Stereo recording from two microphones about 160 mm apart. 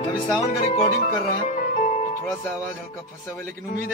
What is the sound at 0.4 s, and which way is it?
Speech, 40° left (ahead or behind).